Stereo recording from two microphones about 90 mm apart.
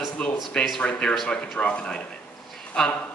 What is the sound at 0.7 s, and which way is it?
A man's voice, 10° left (ahead or behind).